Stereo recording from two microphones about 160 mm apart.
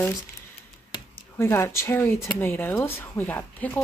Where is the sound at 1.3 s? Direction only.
15° left (ahead or behind).